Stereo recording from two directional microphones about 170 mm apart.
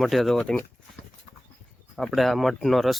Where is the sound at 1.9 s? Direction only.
Centre (ahead or behind).